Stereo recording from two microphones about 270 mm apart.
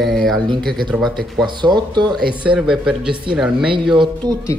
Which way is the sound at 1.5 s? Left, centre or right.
Centre.